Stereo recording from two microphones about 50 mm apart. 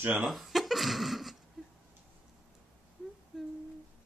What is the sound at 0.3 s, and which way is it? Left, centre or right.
Speech, centre.